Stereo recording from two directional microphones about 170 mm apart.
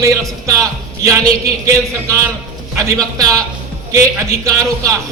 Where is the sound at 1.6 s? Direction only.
20° right (ahead or behind).